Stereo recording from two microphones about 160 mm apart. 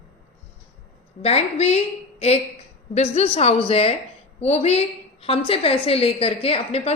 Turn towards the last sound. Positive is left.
turn(degrees=40)  # may be behind; listen again after turning